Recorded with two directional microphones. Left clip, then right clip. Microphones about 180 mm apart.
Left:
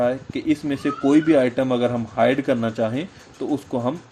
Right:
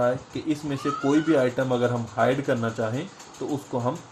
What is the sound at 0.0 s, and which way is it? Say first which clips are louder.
Speech: left 3 dB; 55° left (ahead or behind).